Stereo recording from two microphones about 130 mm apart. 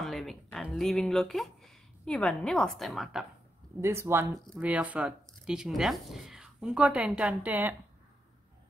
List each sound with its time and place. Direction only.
0.0 s speech: centre (ahead or behind)
3.8 s speech: 20° right (ahead or behind)